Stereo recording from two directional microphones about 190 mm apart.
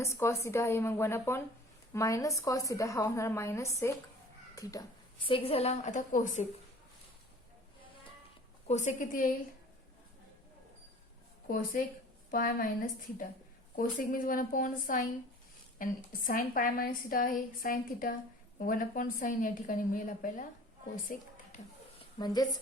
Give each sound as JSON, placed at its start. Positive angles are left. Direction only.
{"t": 0.0, "sound": "a woman's voice", "side_deg": 15}
{"t": 8.6, "sound": "a woman's voice", "side_deg": 40}
{"t": 11.4, "sound": "a woman's voice", "side_deg": 50}
{"t": 22.2, "sound": "a woman's voice", "side_deg": 20}